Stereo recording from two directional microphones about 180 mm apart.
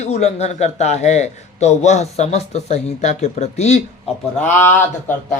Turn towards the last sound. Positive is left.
turn(degrees=15)  # may be behind; listen again after turning